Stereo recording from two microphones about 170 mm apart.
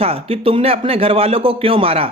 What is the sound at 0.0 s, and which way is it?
Speech, 35° right (ahead or behind).